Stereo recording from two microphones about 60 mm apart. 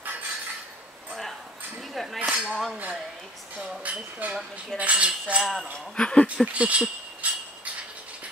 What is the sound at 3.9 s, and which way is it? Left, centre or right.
Cutlery, right.